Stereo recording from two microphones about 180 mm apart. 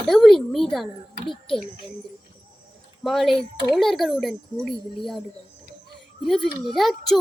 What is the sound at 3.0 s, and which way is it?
Speech, centre (ahead or behind).